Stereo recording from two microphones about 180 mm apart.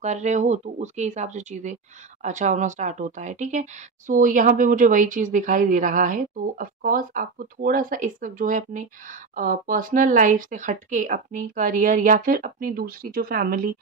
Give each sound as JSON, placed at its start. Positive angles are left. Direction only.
{"t": 0.0, "sound": "a woman's voice", "side_deg": -40}